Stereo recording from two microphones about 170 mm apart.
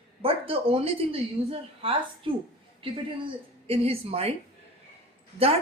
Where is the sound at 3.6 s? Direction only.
35° right (ahead or behind).